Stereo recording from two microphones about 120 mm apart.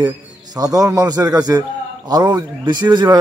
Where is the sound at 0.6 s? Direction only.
30° right (ahead or behind).